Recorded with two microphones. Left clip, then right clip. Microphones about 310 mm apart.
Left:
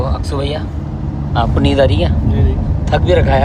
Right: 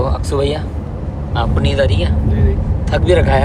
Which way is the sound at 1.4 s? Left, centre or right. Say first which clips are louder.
Left 4 dB; centre.